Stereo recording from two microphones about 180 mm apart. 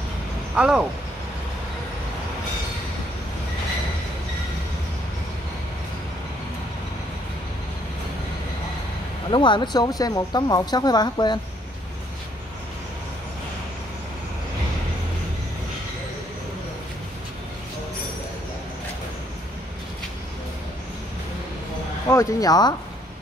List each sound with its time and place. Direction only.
0.6 s speech: 5° right (ahead or behind)
9.3 s a woman's voice: 25° left (ahead or behind)
22.1 s a woman's voice: 20° left (ahead or behind)